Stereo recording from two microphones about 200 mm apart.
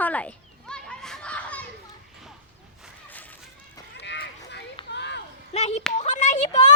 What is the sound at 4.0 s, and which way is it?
Run, 60° left (ahead or behind).